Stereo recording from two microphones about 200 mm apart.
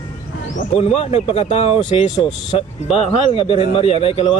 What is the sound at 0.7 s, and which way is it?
Speech, 30° left (ahead or behind).